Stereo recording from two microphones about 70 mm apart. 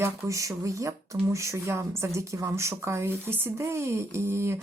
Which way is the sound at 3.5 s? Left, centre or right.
Right.